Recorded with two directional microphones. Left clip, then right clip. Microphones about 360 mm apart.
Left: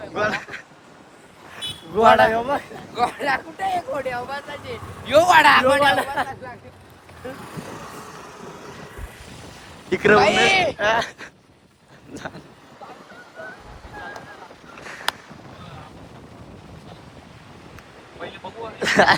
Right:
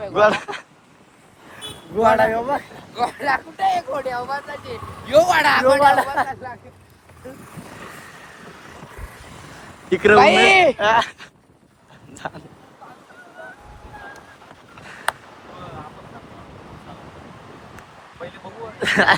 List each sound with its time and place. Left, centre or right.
0.1 s speech: centre
2.0 s speech: centre
9.9 s speech: centre
10.2 s speech: centre
10.8 s speech: centre
14.8 s a sound: centre
18.8 s speech: centre